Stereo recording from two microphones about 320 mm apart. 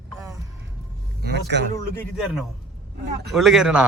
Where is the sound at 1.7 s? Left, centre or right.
Centre.